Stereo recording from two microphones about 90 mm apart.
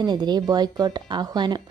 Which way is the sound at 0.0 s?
55° right (ahead or behind).